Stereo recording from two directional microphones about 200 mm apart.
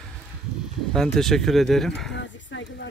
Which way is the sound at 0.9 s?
Centre (ahead or behind).